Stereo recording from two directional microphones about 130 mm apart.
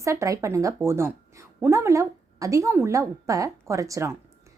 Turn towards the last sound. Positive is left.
turn(degrees=-20)  # may be behind; listen again after turning